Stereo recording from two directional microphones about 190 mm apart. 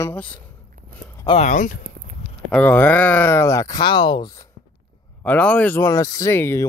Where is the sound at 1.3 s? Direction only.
35° left (ahead or behind).